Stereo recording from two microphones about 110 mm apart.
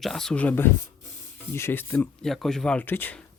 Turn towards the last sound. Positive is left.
turn(degrees=15)  # may be behind; listen again after turning